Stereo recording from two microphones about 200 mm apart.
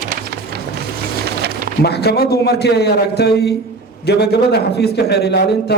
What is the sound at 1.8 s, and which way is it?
A man's voice, 55° left (ahead or behind).